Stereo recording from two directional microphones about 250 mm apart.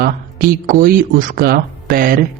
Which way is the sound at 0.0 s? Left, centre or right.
Right.